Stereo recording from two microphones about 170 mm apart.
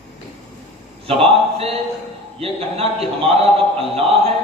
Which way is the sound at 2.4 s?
35° right (ahead or behind).